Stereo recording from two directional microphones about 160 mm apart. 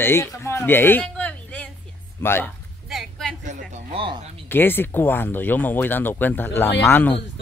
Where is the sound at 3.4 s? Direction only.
40° right (ahead or behind).